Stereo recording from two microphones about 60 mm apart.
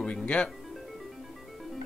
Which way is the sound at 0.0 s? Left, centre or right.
Centre.